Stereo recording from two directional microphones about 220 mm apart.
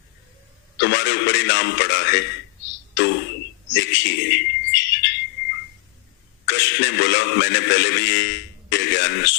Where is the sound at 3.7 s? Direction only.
55° left (ahead or behind).